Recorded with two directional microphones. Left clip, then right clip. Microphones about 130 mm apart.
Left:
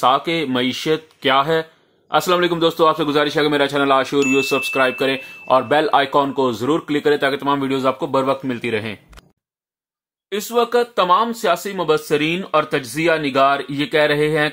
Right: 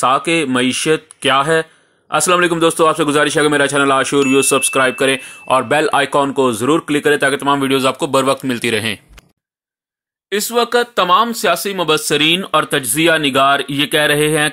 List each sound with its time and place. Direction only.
0.0 s speech: 20° right (ahead or behind); by 9.0 s 45° right (ahead or behind)
10.3 s speech: 25° right (ahead or behind)